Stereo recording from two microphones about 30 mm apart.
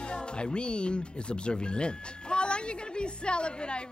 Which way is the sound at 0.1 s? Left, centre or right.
Left.